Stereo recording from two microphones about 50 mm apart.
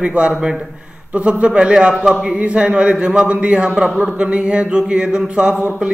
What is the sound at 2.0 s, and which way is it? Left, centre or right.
Speech, centre.